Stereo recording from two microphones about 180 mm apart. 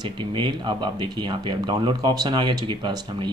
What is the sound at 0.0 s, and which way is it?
Speech, 25° right (ahead or behind).